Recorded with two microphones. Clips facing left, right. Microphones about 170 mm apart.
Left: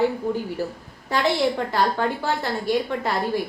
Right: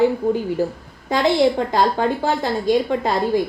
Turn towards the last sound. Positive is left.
turn(degrees=-20)  # may be behind; listen again after turning